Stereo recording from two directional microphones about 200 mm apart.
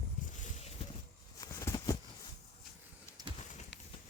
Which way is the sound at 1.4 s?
20° left (ahead or behind).